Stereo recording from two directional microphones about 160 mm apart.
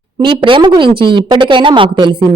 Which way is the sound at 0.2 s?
30° right (ahead or behind).